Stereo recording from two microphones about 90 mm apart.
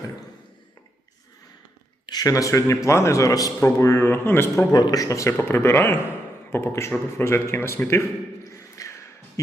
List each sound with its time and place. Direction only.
2.0 s a man's voice: 45° left (ahead or behind)
4.7 s a man's voice: 45° left (ahead or behind)
5.4 s speech: 25° left (ahead or behind)
8.4 s a sound: 35° left (ahead or behind)